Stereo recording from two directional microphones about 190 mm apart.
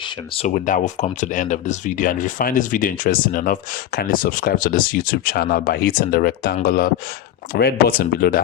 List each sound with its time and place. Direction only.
0.3 s speech: 40° left (ahead or behind)